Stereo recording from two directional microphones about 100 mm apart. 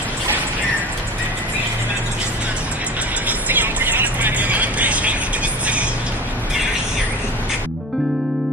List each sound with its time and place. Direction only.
3.3 s vehicle: 20° right (ahead or behind)